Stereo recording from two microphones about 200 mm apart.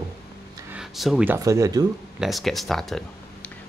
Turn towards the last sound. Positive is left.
turn(degrees=0)  # may be behind; listen again after turning